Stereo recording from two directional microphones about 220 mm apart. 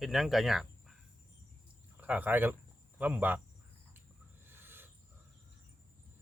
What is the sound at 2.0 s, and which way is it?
Speech, 10° right (ahead or behind).